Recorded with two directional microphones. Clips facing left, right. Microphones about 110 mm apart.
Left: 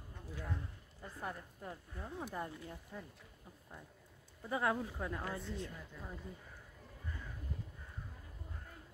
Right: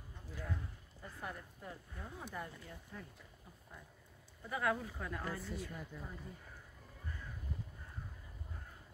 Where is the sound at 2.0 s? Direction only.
20° left (ahead or behind).